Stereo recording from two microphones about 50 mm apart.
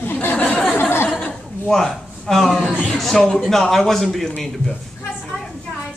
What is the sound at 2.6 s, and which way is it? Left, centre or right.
Speech, left.